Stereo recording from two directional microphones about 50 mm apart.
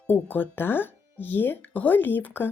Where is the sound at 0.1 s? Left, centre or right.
Left.